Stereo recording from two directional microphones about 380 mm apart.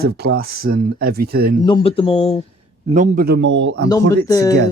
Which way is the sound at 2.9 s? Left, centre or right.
Right.